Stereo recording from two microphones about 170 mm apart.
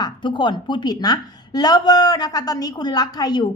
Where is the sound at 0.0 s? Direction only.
30° left (ahead or behind).